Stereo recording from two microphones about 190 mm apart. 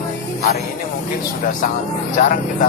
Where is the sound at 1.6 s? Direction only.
40° left (ahead or behind).